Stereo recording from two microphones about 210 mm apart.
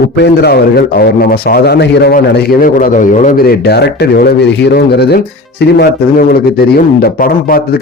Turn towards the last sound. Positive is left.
turn(degrees=40)  # may be behind; listen again after turning